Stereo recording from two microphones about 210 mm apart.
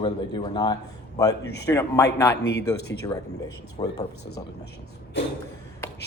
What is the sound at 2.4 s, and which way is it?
Speech, 50° left (ahead or behind).